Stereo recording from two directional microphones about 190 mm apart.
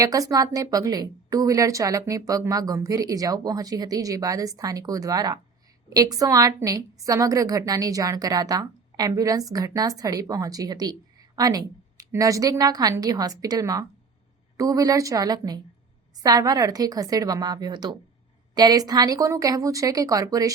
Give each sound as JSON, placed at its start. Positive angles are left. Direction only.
{"t": 0.0, "sound": "a woman's voice", "side_deg": -20}